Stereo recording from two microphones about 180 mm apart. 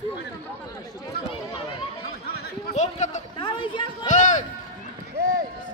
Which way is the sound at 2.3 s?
60° left (ahead or behind).